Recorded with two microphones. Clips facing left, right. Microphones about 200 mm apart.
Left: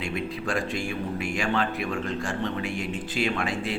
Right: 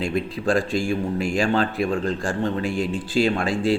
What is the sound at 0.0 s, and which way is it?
Speech, 35° right (ahead or behind).